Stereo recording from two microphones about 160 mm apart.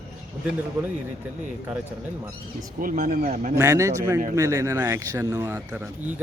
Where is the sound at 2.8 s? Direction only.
60° right (ahead or behind).